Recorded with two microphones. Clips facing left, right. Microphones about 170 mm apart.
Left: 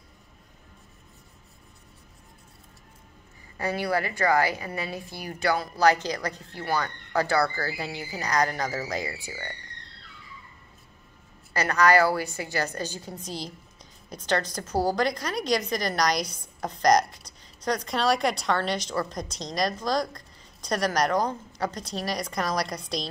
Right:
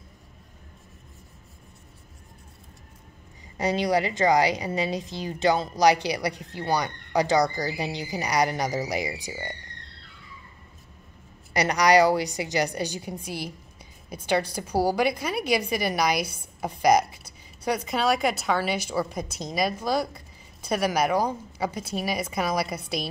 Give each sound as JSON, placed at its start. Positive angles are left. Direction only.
{"t": 3.5, "sound": "a woman's voice", "side_deg": -20}
{"t": 11.5, "sound": "a woman's voice", "side_deg": -15}